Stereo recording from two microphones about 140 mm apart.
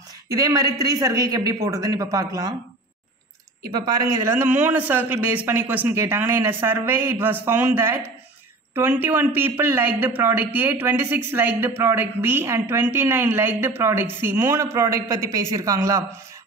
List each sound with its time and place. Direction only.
0.3 s a man's voice: 25° right (ahead or behind)
3.7 s a man's voice: 30° right (ahead or behind)
4.3 s a man's voice: 15° right (ahead or behind)